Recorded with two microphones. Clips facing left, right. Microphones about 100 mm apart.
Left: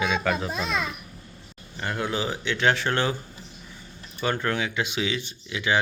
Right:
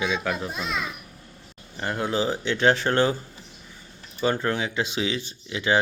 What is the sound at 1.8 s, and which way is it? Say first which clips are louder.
Speech: right 3 dB; 30° right (ahead or behind).